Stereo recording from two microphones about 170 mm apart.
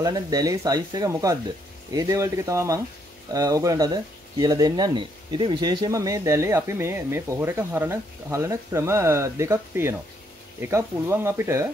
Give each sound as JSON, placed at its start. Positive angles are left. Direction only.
{"t": 0.0, "sound": "speech", "side_deg": -20}